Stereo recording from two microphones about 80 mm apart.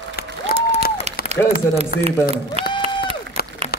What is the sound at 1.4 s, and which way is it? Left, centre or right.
Run, left.